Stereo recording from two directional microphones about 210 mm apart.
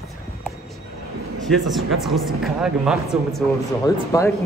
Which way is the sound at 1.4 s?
Centre (ahead or behind).